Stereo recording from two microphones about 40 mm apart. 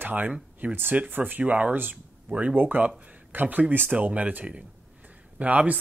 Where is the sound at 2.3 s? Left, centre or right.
Right.